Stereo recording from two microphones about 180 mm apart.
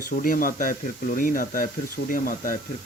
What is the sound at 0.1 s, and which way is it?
Speech, 50° left (ahead or behind).